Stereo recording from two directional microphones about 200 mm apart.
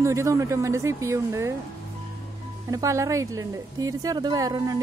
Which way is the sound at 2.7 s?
15° right (ahead or behind).